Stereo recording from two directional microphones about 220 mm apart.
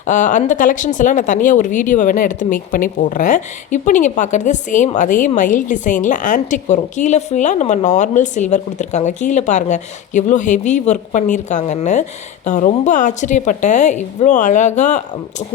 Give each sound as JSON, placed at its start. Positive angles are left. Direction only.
{"t": 0.0, "sound": "speech", "side_deg": 35}